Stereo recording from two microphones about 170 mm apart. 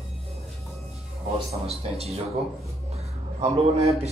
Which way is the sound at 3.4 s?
35° right (ahead or behind).